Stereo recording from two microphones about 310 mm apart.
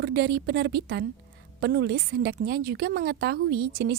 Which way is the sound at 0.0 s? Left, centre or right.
Right.